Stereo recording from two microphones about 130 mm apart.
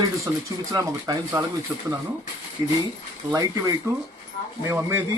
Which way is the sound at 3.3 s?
25° right (ahead or behind).